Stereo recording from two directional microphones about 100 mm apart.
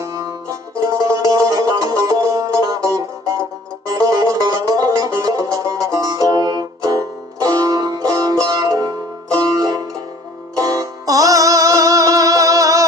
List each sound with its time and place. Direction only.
0.0 s music: 30° right (ahead or behind)